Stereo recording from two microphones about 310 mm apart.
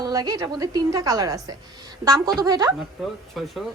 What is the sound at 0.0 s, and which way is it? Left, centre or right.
A woman's voice, centre.